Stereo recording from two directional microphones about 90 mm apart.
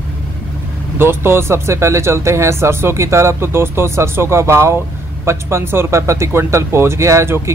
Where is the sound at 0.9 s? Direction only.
25° right (ahead or behind).